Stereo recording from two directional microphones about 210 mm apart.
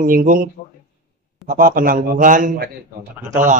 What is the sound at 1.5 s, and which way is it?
Speech, 40° right (ahead or behind).